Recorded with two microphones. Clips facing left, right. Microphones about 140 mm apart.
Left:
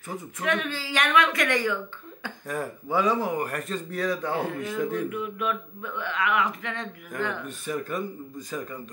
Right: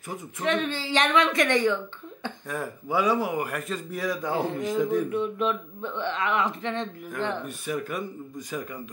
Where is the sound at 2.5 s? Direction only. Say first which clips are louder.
Left 1 dB; 5° right (ahead or behind).